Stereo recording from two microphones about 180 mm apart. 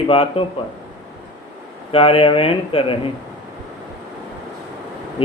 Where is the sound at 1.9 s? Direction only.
30° left (ahead or behind).